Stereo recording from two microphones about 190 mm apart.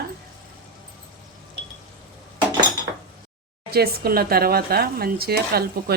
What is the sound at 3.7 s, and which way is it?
Speech, 55° right (ahead or behind).